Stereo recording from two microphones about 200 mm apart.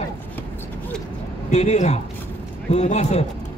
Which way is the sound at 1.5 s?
35° left (ahead or behind).